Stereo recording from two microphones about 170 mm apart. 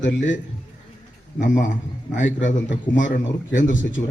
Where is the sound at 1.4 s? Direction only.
50° left (ahead or behind).